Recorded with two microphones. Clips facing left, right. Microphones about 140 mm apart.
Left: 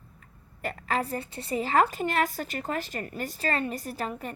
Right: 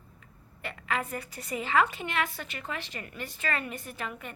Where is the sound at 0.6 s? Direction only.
35° left (ahead or behind).